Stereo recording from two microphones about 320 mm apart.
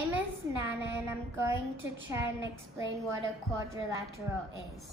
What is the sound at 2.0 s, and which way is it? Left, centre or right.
A woman's voice, centre.